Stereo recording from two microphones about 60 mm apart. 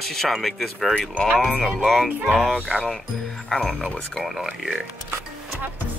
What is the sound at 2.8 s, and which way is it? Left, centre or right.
Speech, centre.